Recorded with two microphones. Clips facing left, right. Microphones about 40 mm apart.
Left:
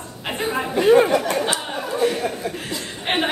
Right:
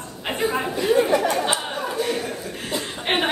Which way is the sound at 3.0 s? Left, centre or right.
Centre.